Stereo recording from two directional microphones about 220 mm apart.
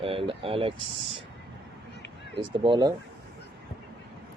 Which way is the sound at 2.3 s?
20° right (ahead or behind).